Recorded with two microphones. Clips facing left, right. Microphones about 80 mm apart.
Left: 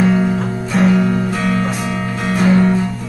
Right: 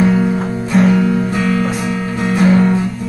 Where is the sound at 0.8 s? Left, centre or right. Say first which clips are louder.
Right 1 dB; left.